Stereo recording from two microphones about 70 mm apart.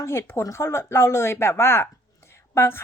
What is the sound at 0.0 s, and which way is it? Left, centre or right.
Speech, left.